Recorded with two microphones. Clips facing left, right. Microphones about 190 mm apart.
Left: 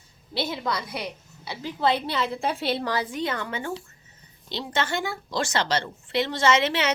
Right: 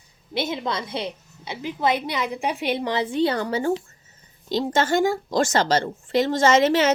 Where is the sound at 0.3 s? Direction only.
20° right (ahead or behind).